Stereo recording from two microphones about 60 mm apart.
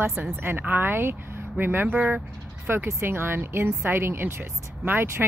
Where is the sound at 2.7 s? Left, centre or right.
Right.